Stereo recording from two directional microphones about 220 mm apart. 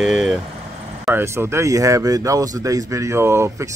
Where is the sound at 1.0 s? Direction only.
10° right (ahead or behind).